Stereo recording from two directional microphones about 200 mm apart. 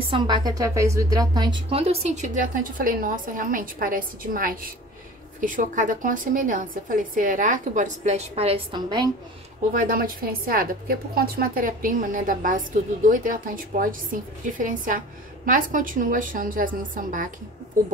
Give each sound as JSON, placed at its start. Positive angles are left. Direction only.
{"t": 0.1, "sound": "a woman's voice", "side_deg": -20}
{"t": 9.8, "sound": "a woman's voice", "side_deg": -45}